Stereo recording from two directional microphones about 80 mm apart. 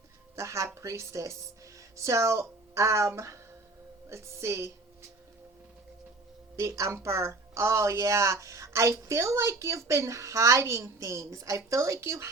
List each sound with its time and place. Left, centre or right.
0.3 s speech: right
6.6 s speech: right